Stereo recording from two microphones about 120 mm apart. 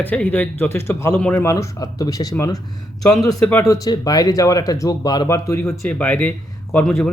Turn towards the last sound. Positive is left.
turn(degrees=10)  # may be behind; listen again after turning